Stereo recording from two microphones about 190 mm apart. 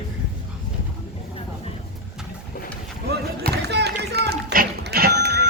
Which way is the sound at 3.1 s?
60° right (ahead or behind).